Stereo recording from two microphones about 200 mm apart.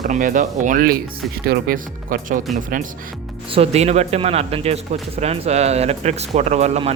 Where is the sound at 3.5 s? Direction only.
30° right (ahead or behind).